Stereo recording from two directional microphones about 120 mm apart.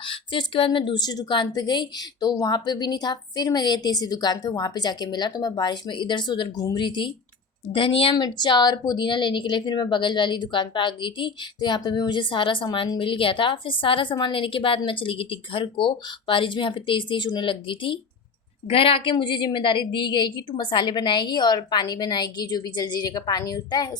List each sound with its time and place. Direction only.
0.0 s a woman's voice: 45° left (ahead or behind)
8.1 s a woman's voice: 35° left (ahead or behind)